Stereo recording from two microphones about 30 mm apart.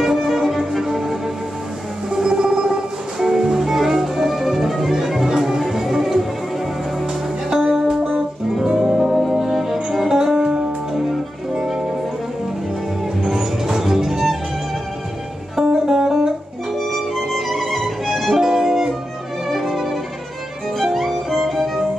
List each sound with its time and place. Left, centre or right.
0.0 s music: centre
2.0 s music: right
3.2 s music: centre
8.6 s music: right
9.0 s music: centre
10.0 s music: centre
11.6 s music: centre
13.2 s music: centre
15.5 s music: centre
16.7 s music: centre
18.4 s music: centre
19.6 s violin: centre
20.8 s music: centre